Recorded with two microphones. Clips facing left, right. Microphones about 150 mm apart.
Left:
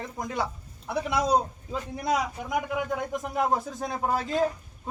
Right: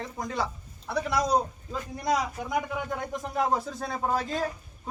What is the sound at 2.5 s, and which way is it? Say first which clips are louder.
A man's voice: left 3 dB; 5° left (ahead or behind).